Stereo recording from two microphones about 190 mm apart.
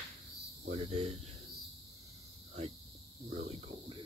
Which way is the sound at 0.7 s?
35° right (ahead or behind).